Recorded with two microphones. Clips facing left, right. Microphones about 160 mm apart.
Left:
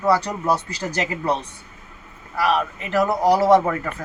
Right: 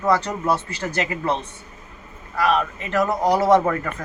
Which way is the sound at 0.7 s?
35° left (ahead or behind).